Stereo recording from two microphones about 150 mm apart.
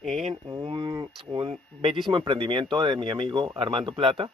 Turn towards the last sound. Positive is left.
turn(degrees=-35)  # may be behind; listen again after turning